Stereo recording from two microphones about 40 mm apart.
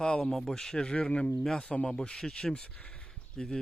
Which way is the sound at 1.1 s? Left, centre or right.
Left.